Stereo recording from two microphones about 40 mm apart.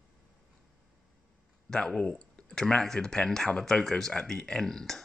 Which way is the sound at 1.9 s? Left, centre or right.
Centre.